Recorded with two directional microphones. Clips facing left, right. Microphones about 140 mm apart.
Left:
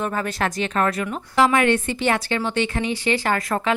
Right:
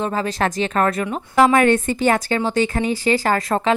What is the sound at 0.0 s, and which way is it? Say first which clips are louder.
Speech: right 3 dB; 25° right (ahead or behind).